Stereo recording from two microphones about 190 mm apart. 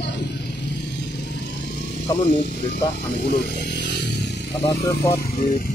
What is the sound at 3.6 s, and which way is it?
Chainsaw, 65° left (ahead or behind).